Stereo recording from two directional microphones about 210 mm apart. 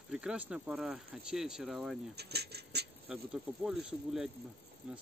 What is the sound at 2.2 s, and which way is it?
Speech, 50° right (ahead or behind).